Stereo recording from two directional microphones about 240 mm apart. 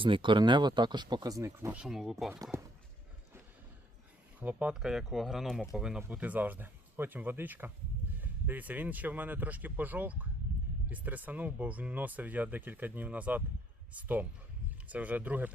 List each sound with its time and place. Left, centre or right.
0.0 s speech: right; by 2.4 s centre
2.4 s speech: centre
4.4 s speech: centre